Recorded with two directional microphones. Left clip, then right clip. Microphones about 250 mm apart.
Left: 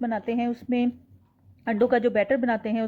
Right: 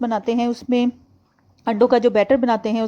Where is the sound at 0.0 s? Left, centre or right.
Right.